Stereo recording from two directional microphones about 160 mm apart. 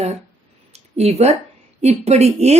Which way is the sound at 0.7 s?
40° right (ahead or behind).